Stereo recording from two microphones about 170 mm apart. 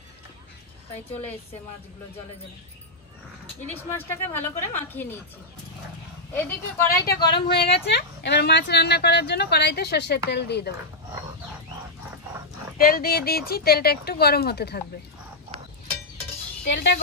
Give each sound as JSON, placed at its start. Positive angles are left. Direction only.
{"t": 3.7, "sound": "a woman's voice", "side_deg": 10}
{"t": 6.3, "sound": "a woman's voice", "side_deg": 15}
{"t": 7.2, "sound": "speech", "side_deg": 70}
{"t": 12.7, "sound": "speech", "side_deg": 60}
{"t": 16.6, "sound": "speech", "side_deg": 90}